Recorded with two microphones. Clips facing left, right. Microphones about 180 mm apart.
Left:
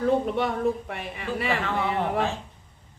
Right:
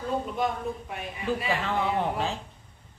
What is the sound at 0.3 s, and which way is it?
Speech, 70° left (ahead or behind).